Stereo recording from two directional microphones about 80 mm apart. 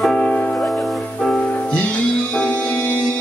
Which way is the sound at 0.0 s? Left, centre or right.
Centre.